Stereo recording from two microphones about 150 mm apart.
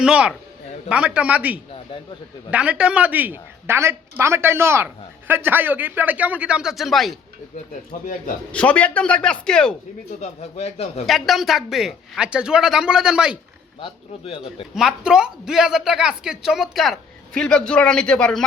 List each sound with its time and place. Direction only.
0.0 s a woman's voice: 5° right (ahead or behind)
8.5 s speech: 10° left (ahead or behind)
10.2 s a man's voice: 45° left (ahead or behind)
11.0 s speech: centre (ahead or behind)
13.8 s a man's voice: 40° left (ahead or behind)
14.4 s speech: 5° right (ahead or behind)